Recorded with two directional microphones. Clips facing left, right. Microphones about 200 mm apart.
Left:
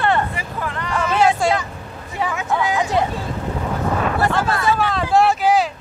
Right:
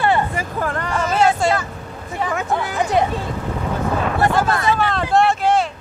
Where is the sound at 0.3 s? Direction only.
45° right (ahead or behind).